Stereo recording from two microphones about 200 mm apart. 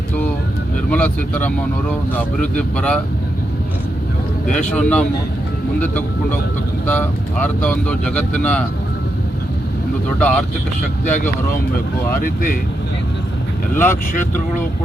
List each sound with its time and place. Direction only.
0.9 s speech: 5° left (ahead or behind)
4.7 s speech: 5° left (ahead or behind)
10.2 s speech: 5° left (ahead or behind)
11.0 s speech: 40° left (ahead or behind)
13.7 s speech: 10° left (ahead or behind)